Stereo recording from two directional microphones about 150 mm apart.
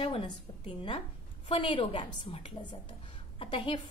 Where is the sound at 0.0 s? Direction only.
35° left (ahead or behind).